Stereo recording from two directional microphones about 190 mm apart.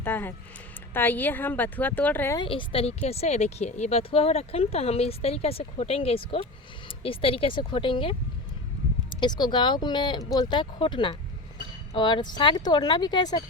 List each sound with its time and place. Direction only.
0.0 s speech: 10° left (ahead or behind)
2.4 s speech: 25° left (ahead or behind)